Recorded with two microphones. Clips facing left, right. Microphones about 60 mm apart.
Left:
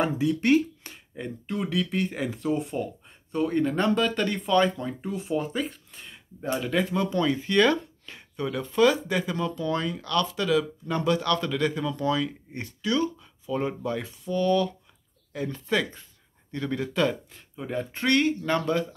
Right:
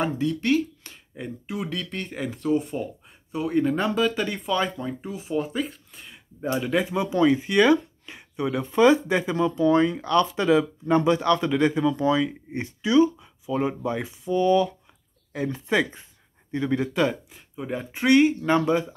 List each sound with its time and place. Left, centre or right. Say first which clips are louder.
0.0 s speech: even; centre
0.4 s a sound: left 3 dB; left
1.1 s speech: even; centre